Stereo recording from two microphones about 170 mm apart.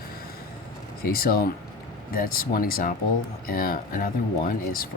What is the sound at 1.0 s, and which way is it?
Speech, 60° left (ahead or behind).